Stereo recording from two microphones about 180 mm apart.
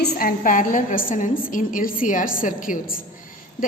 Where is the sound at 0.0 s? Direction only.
50° left (ahead or behind).